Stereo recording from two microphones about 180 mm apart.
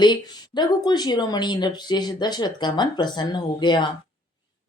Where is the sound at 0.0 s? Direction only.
25° left (ahead or behind).